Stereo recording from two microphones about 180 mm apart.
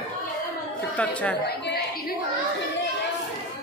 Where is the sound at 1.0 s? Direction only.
5° left (ahead or behind).